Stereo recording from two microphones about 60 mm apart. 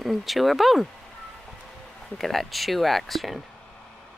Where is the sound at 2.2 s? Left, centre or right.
Centre.